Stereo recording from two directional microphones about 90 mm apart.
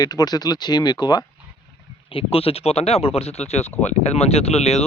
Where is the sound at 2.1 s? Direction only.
90° left.